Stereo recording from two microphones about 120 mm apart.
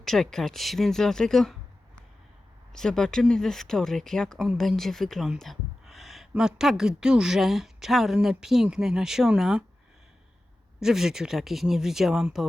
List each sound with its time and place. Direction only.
0.0 s speech: 5° left (ahead or behind)
2.7 s speech: 5° left (ahead or behind)
10.8 s speech: 5° right (ahead or behind)